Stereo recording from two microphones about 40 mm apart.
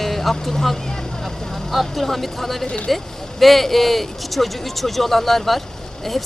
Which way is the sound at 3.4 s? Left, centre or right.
Centre.